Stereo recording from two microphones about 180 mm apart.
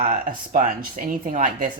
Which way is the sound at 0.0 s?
50° right (ahead or behind).